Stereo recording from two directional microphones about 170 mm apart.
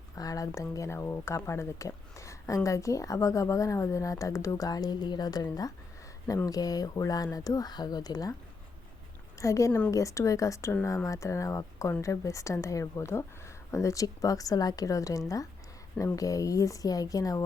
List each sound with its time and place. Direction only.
0.2 s a woman's voice: 20° left (ahead or behind)
9.4 s a woman's voice: 20° left (ahead or behind)